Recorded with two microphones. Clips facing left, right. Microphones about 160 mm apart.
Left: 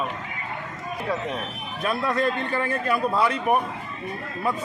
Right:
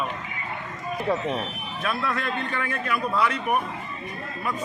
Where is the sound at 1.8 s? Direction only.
35° left (ahead or behind).